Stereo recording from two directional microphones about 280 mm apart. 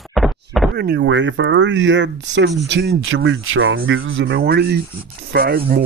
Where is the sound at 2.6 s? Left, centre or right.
Right.